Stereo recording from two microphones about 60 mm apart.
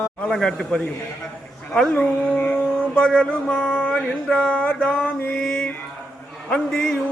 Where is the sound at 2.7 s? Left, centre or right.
Centre.